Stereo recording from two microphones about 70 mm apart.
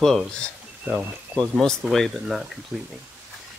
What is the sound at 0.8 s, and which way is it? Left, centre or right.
Speech, centre.